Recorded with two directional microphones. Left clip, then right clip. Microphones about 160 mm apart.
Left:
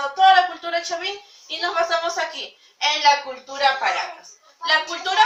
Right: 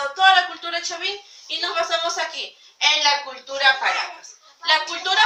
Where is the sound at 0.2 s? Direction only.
5° left (ahead or behind).